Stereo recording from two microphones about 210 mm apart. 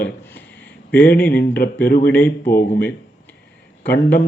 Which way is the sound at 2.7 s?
10° left (ahead or behind).